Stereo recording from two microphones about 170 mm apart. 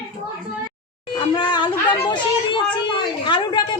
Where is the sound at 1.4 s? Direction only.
25° left (ahead or behind).